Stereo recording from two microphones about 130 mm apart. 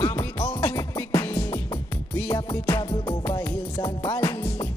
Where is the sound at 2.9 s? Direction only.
30° left (ahead or behind).